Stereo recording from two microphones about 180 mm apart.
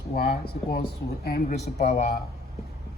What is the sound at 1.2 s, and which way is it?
Speech, 60° left (ahead or behind).